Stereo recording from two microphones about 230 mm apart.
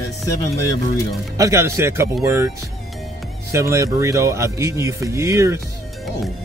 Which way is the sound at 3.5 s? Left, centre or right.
Centre.